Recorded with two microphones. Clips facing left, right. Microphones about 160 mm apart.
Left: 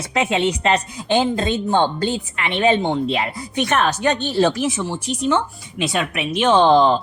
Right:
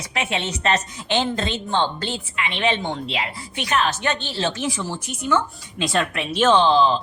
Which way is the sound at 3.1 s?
50° left (ahead or behind).